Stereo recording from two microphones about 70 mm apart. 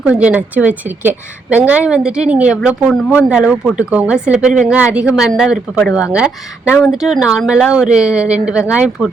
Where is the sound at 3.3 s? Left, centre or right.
Centre.